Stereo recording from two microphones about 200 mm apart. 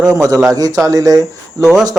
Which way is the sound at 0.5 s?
20° right (ahead or behind).